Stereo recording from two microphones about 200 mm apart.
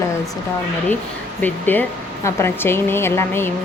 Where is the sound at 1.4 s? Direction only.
10° left (ahead or behind).